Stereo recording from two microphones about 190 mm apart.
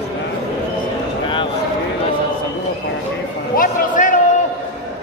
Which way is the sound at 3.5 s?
45° left (ahead or behind).